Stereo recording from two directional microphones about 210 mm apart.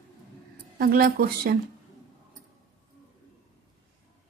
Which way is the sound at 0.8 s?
45° right (ahead or behind).